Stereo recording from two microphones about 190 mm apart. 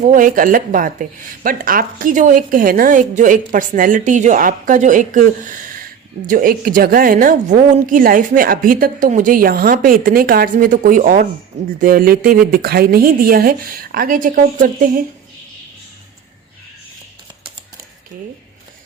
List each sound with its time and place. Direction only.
0.1 s a woman's voice: 45° right (ahead or behind)